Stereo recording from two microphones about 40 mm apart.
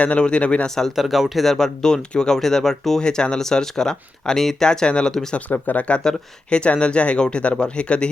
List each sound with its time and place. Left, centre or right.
0.0 s speech: left
0.9 s speech: centre
1.5 s speech: centre
3.0 s speech: left
5.5 s speech: left
6.0 s speech: left